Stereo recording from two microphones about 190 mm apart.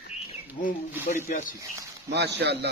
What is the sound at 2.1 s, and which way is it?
Speech, 60° right (ahead or behind).